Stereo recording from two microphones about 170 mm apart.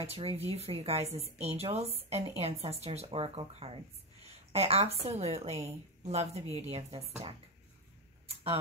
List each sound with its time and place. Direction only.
0.0 s speech: 35° right (ahead or behind)